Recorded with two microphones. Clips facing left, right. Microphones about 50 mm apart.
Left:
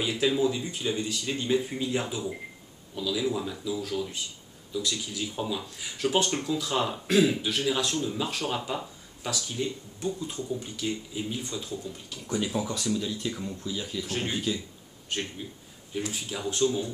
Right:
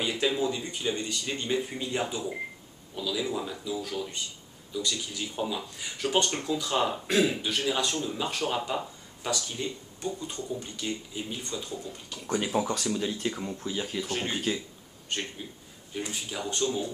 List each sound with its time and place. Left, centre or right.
0.0 s speech: centre
12.4 s speech: right
12.6 s speech: right
12.9 s speech: right
14.0 s speech: centre
14.3 s speech: right
15.0 s speech: centre